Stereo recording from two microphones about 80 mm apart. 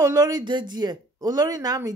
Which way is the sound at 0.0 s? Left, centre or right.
Right.